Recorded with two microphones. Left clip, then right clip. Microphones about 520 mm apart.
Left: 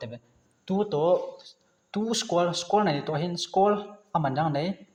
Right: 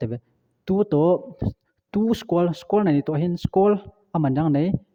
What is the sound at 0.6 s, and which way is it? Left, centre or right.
Speech, right.